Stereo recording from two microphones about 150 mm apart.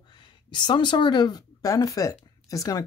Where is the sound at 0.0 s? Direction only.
30° left (ahead or behind).